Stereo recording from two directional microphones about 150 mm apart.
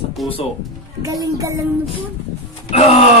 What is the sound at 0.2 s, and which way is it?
Speech, centre (ahead or behind).